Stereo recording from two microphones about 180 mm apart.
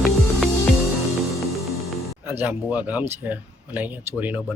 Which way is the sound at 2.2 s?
10° right (ahead or behind).